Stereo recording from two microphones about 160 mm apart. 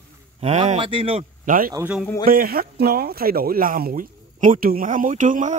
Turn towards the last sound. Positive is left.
turn(degrees=-55)  # may be behind; listen again after turning